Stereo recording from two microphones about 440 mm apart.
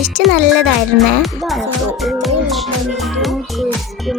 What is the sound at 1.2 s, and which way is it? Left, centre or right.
Music, centre.